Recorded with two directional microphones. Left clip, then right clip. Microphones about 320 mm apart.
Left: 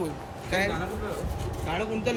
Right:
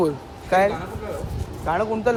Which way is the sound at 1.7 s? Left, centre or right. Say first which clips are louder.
Right 8 dB; right.